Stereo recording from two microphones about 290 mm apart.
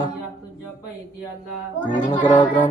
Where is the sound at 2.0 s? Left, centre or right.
Centre.